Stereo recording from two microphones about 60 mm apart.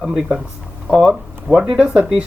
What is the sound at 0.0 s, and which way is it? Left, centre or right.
Speech, centre.